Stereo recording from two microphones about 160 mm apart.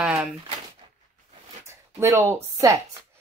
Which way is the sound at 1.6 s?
15° right (ahead or behind).